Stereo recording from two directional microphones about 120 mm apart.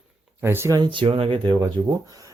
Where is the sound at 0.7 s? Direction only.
40° right (ahead or behind).